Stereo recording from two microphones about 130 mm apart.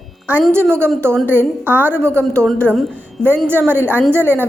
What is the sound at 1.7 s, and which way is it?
Speech, 15° right (ahead or behind).